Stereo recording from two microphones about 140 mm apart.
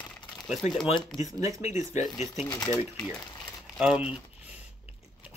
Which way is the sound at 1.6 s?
55° left (ahead or behind).